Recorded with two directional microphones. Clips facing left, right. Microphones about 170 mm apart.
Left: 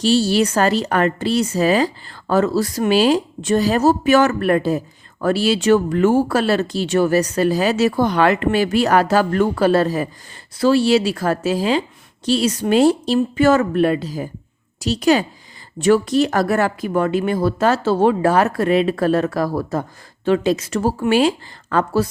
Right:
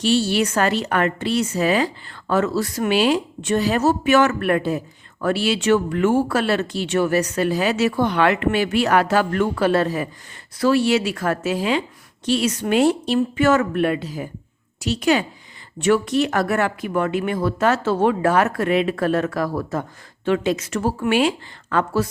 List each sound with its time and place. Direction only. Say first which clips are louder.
0.0 s speech: left 3 dB; 35° left (ahead or behind)